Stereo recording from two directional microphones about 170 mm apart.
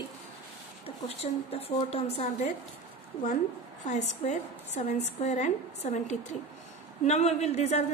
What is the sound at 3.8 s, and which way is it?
A woman's voice, 45° left (ahead or behind).